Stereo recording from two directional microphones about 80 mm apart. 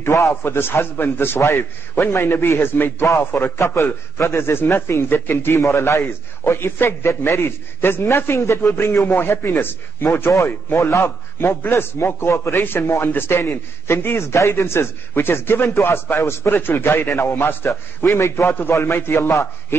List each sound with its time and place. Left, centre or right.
0.0 s a man's voice: left